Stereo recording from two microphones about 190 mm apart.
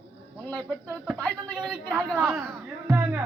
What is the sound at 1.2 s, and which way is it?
Speech, 5° left (ahead or behind).